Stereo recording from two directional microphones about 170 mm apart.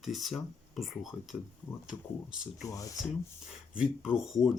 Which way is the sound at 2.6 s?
20° left (ahead or behind).